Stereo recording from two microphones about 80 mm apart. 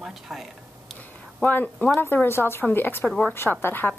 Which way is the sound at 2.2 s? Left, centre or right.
Left.